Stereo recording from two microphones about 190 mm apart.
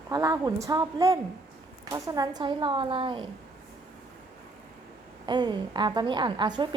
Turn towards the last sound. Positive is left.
turn(degrees=-25)  # may be behind; listen again after turning